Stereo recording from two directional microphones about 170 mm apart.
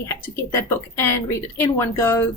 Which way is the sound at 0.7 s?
15° left (ahead or behind).